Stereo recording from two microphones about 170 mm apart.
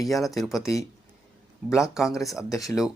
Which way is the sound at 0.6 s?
20° left (ahead or behind).